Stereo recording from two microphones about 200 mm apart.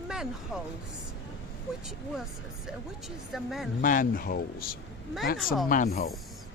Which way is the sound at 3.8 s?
45° left (ahead or behind).